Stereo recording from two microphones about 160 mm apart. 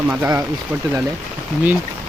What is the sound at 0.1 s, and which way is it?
Speech, 15° right (ahead or behind).